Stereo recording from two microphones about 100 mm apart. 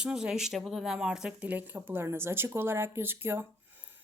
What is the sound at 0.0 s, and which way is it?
Speech, 10° right (ahead or behind).